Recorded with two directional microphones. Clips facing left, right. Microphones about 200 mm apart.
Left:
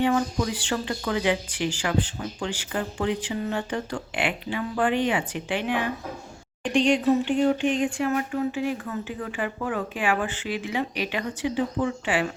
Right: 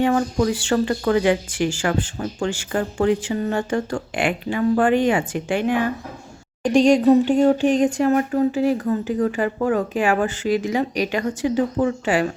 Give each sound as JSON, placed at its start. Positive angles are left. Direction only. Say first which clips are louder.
{"t": 0.0, "sound": "speech", "louder": "right 5 dB", "side_deg": -50}